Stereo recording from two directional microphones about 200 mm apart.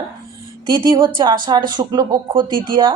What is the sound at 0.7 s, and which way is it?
Speech, 25° right (ahead or behind).